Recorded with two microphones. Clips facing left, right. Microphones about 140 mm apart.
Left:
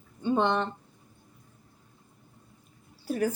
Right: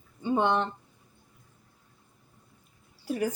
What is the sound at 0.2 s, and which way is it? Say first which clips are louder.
Speech: even; 10° right (ahead or behind).